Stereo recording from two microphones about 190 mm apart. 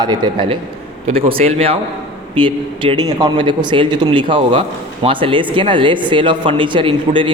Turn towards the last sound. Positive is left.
turn(degrees=-25)  # may be behind; listen again after turning